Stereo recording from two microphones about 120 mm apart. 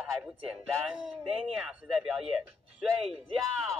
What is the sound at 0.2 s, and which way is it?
Speech, 5° right (ahead or behind).